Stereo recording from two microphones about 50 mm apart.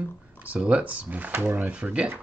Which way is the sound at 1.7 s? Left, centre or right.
Right.